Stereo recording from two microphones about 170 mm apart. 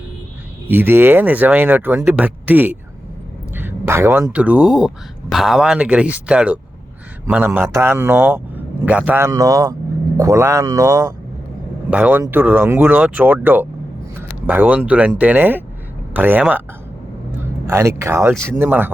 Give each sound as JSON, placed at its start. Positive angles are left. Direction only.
{"t": 0.7, "sound": "a man's voice", "side_deg": -10}
{"t": 17.7, "sound": "a man's voice", "side_deg": -15}